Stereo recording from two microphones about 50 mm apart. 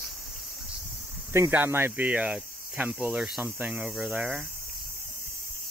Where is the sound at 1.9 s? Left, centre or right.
Right.